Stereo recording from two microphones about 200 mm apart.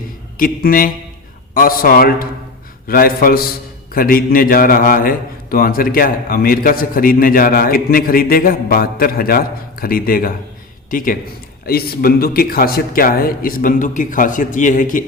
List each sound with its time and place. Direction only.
0.3 s a man's voice: 45° left (ahead or behind)